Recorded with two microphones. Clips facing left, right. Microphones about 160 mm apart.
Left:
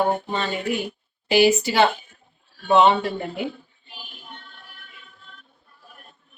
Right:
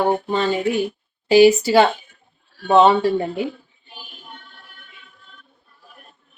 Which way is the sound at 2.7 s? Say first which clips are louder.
Right 4 dB; 35° right (ahead or behind).